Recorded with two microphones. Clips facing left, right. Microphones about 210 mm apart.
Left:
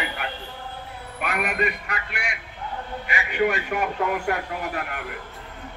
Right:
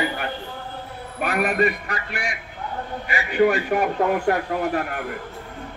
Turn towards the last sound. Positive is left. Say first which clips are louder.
# right 6 dB
turn(degrees=-35)  # may be behind; listen again after turning